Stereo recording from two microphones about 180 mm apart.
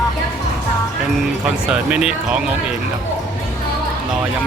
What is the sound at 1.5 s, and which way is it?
Speech, 5° right (ahead or behind).